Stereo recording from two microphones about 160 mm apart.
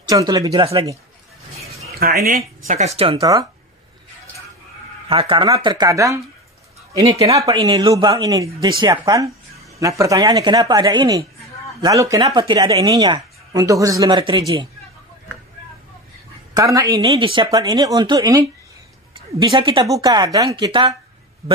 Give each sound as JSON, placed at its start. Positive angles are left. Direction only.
{"t": 0.1, "sound": "speech", "side_deg": -20}
{"t": 2.0, "sound": "speech", "side_deg": -70}
{"t": 2.3, "sound": "speech", "side_deg": -45}
{"t": 3.2, "sound": "speech", "side_deg": -20}
{"t": 5.0, "sound": "speech", "side_deg": -35}
{"t": 7.2, "sound": "speech", "side_deg": -20}
{"t": 7.6, "sound": "a man's voice", "side_deg": -30}
{"t": 16.5, "sound": "speech", "side_deg": -20}
{"t": 17.1, "sound": "speech", "side_deg": -30}